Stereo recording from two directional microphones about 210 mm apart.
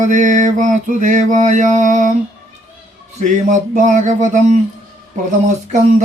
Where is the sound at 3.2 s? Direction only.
35° right (ahead or behind).